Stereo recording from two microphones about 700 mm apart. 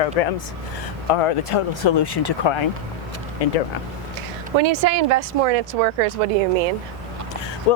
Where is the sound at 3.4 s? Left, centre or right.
Left.